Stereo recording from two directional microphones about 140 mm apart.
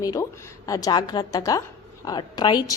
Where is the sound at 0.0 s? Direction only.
25° left (ahead or behind).